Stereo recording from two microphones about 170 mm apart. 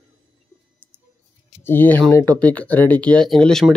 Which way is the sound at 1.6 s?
10° left (ahead or behind).